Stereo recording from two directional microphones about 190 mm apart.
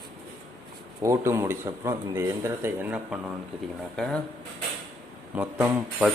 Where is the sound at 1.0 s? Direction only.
15° right (ahead or behind); by 4.2 s centre (ahead or behind).